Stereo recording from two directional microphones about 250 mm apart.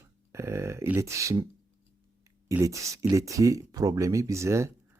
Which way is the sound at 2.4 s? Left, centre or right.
Centre.